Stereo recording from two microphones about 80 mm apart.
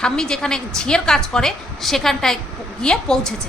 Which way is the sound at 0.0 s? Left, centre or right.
Centre.